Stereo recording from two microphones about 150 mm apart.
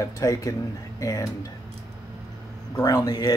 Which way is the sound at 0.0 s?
25° left (ahead or behind).